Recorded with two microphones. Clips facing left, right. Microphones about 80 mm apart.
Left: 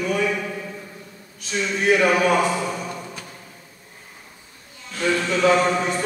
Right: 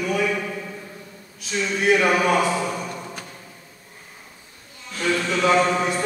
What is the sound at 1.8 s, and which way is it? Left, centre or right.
A man's voice, centre.